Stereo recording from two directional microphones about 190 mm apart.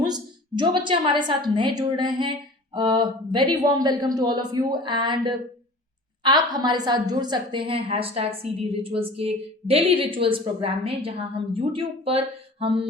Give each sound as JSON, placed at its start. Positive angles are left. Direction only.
{"t": 0.6, "sound": "a woman's voice", "side_deg": -25}